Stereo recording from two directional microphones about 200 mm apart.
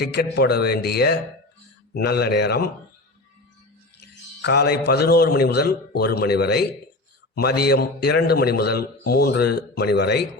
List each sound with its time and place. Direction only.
0.0 s a man's voice: 55° left (ahead or behind)
4.4 s a man's voice: 55° left (ahead or behind)